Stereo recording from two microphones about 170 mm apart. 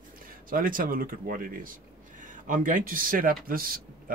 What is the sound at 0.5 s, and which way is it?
Speech, 55° right (ahead or behind).